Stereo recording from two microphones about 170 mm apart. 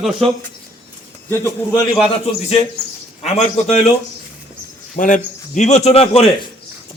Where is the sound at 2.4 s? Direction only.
35° left (ahead or behind).